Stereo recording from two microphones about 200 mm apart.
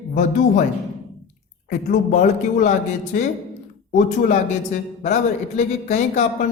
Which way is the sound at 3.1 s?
45° left (ahead or behind).